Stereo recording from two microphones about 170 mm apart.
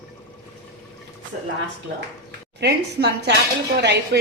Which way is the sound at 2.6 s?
75° right (ahead or behind).